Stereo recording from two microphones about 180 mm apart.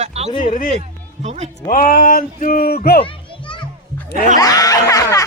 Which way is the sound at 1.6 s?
50° left (ahead or behind).